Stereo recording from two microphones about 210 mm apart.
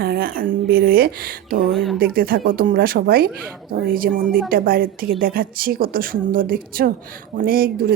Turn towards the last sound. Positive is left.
turn(degrees=-45)  # may be behind; listen again after turning